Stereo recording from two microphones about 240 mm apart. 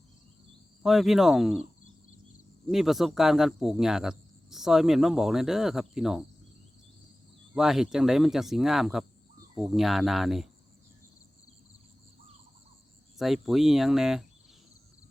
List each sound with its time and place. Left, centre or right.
0.8 s speech: centre
2.6 s speech: centre
7.5 s speech: centre
13.1 s speech: centre